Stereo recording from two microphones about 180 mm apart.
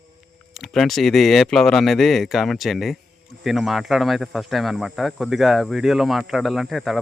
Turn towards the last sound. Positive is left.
turn(degrees=0)  # may be behind; listen again after turning